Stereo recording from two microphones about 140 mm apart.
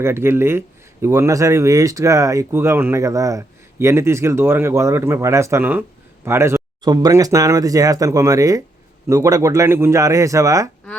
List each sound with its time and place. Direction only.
0.0 s speech: 15° right (ahead or behind)